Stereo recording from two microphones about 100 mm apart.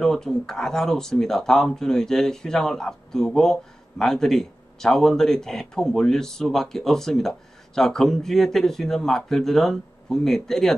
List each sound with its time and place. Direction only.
0.0 s speech: 5° left (ahead or behind)